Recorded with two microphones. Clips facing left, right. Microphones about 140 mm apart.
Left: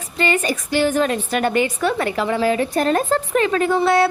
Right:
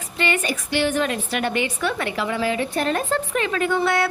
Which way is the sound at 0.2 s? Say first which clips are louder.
Left 4 dB; 40° left (ahead or behind).